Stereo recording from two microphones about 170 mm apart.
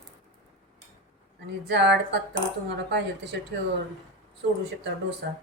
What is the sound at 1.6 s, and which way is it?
Speech, 90° right.